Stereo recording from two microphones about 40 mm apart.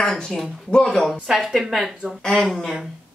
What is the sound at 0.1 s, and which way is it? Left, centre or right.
Speech, centre.